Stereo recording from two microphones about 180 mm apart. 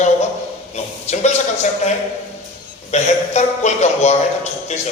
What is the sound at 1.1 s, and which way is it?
Speech, 40° left (ahead or behind).